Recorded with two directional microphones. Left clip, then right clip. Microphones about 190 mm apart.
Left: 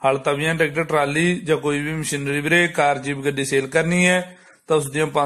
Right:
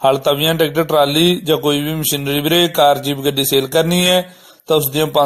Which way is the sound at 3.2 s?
30° right (ahead or behind).